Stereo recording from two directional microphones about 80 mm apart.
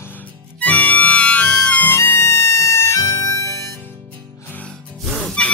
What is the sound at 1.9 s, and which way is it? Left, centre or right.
Music, left.